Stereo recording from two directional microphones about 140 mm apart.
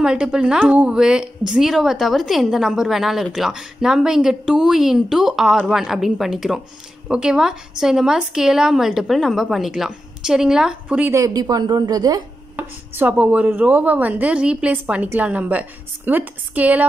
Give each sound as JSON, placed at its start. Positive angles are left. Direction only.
{"t": 0.0, "sound": "a woman's voice", "side_deg": -5}
{"t": 11.1, "sound": "a woman's voice", "side_deg": -25}
{"t": 12.5, "sound": "speech", "side_deg": -15}